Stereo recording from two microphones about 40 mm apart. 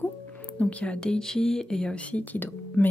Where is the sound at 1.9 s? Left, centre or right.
Left.